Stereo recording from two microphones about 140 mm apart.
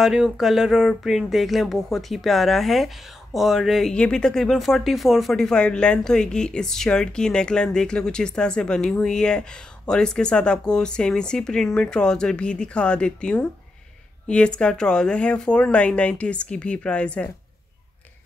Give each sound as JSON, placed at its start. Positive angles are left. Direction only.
{"t": 0.0, "sound": "speech", "side_deg": -5}